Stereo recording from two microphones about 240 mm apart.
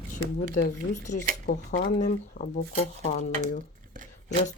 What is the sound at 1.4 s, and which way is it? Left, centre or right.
Speech, left.